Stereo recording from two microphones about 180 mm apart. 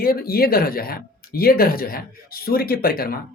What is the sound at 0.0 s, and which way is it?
Speech, 55° left (ahead or behind).